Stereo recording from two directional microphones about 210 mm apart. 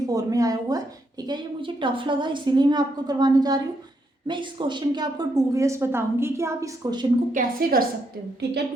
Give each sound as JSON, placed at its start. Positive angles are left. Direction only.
{"t": 0.0, "sound": "a woman's voice", "side_deg": -15}
{"t": 7.3, "sound": "a woman's voice", "side_deg": -45}